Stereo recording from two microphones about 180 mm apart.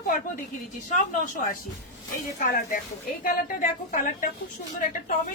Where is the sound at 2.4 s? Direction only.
50° left (ahead or behind).